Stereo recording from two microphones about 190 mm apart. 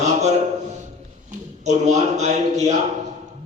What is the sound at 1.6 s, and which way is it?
A man's voice, 35° right (ahead or behind).